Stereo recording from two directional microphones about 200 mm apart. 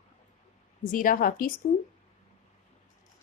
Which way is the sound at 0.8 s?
45° left (ahead or behind).